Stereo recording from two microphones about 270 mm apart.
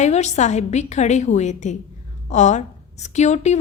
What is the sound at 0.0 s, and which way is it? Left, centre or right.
A woman's voice, left.